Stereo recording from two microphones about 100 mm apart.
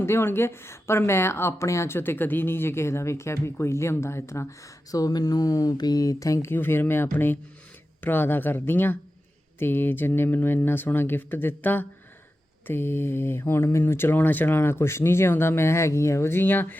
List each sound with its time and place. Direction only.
0.0 s speech: 25° left (ahead or behind)